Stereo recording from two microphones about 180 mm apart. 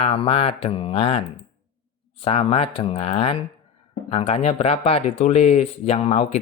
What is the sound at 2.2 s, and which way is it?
Speech, 30° left (ahead or behind).